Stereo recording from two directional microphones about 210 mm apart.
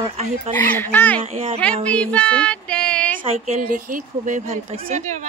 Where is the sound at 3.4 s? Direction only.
40° right (ahead or behind).